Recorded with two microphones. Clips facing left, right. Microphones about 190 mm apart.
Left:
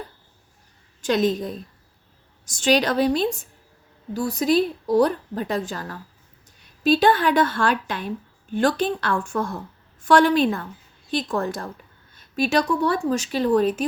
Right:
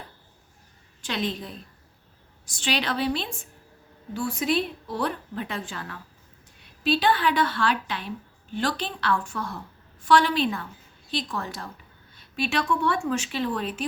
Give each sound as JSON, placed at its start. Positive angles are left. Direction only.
{"t": 1.0, "sound": "a woman's voice", "side_deg": 45}